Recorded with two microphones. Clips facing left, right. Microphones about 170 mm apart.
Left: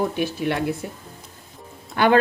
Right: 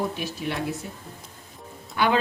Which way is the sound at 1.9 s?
55° left (ahead or behind).